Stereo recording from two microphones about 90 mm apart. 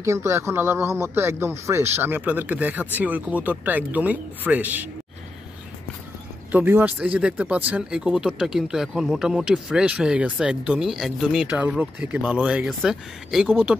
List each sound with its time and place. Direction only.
0.0 s speech: 30° right (ahead or behind)
6.5 s speech: 20° right (ahead or behind); by 11.4 s 5° right (ahead or behind)
11.4 s speech: 15° right (ahead or behind)
13.5 s speech: 15° right (ahead or behind)